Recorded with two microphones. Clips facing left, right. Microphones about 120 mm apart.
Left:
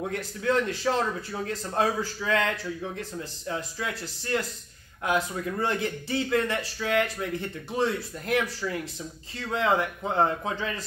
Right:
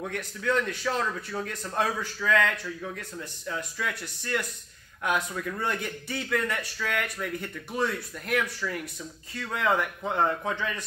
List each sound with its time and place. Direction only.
0.0 s a man's voice: 25° left (ahead or behind)
10.5 s speech: 30° left (ahead or behind)